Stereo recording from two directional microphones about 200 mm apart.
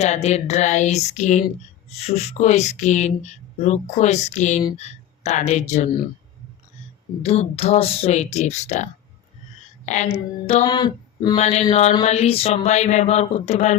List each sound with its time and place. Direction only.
0.0 s speech: 35° left (ahead or behind)
7.2 s speech: 30° left (ahead or behind)
10.7 s female singing: 20° left (ahead or behind)
11.3 s speech: 35° left (ahead or behind)